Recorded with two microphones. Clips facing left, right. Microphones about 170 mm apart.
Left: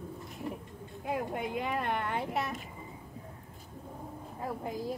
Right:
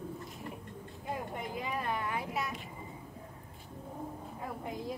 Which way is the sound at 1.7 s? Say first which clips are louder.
Left 2 dB; 65° left (ahead or behind).